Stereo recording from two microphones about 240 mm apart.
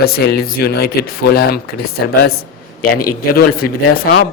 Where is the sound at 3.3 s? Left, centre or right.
Left.